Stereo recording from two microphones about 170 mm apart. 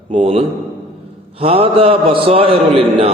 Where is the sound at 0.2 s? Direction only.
35° right (ahead or behind).